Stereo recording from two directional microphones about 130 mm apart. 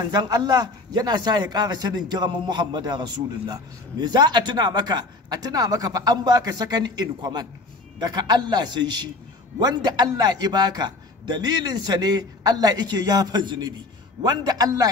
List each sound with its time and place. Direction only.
0.0 s a man's voice: 30° right (ahead or behind)